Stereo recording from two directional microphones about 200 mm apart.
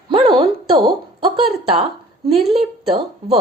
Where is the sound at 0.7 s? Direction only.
25° right (ahead or behind).